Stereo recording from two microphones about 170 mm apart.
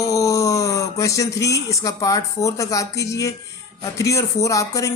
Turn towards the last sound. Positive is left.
turn(degrees=20)  # may be behind; listen again after turning